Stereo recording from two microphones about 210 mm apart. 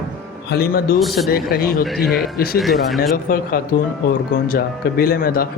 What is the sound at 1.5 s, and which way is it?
Speech, 45° left (ahead or behind).